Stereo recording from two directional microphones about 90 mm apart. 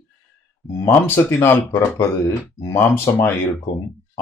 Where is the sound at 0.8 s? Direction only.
25° left (ahead or behind).